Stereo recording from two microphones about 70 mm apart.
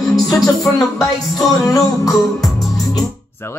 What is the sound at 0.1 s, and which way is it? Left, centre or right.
Music, centre.